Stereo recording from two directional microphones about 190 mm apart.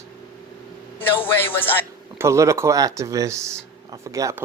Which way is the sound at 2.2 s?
15° right (ahead or behind).